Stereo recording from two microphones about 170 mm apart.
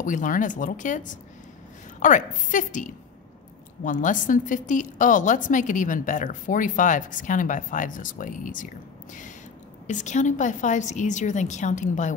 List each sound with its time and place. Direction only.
0.0 s a woman's voice: 50° left (ahead or behind)